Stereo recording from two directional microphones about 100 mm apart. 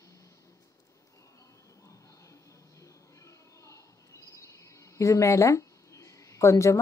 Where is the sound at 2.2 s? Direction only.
30° left (ahead or behind).